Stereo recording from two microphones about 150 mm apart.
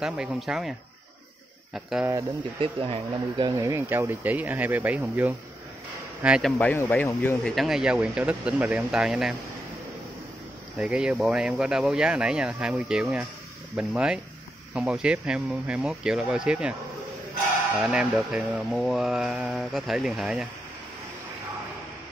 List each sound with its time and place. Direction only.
0.0 s speech: 5° right (ahead or behind)
2.6 s speech: 35° right (ahead or behind)
3.4 s speech: 20° right (ahead or behind)
6.6 s speech: 15° left (ahead or behind); by 9.3 s 5° right (ahead or behind)
10.8 s speech: 5° right (ahead or behind)
17.7 s speech: 5° right (ahead or behind)